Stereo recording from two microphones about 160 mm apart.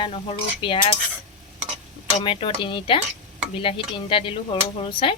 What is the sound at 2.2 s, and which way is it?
Speech, 35° left (ahead or behind).